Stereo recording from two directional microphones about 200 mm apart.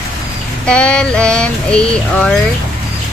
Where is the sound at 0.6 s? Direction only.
5° left (ahead or behind).